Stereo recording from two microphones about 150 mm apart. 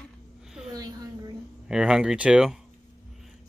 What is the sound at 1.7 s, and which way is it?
Speech, 5° right (ahead or behind).